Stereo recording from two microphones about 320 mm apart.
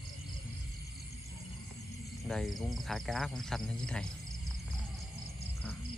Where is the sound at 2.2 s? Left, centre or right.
Centre.